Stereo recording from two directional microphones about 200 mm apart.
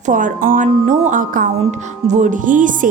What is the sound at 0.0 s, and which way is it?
Music, 40° right (ahead or behind).